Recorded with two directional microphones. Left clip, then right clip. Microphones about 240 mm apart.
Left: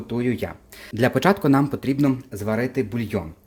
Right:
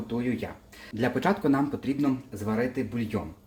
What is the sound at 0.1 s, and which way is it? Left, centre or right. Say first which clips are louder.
Speech: left 7 dB; left.